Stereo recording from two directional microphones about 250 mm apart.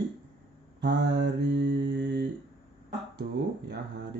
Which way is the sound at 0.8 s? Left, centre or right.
Right.